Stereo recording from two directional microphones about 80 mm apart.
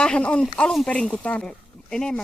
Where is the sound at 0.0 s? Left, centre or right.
Centre.